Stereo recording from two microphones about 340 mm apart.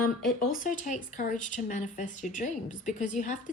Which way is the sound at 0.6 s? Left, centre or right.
Left.